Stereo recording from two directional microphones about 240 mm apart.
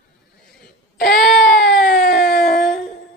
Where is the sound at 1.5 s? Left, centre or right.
Left.